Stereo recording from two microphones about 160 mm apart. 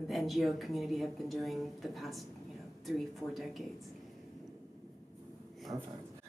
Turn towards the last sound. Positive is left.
turn(degrees=-25)  # may be behind; listen again after turning